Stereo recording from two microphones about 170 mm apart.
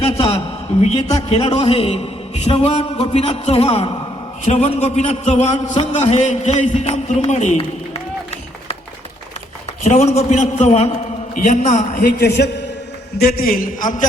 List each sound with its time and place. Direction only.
0.0 s a man's voice: 35° left (ahead or behind)
9.8 s a man's voice: 40° left (ahead or behind)
12.2 s a man's voice: 80° left
13.1 s a man's voice: 60° left (ahead or behind)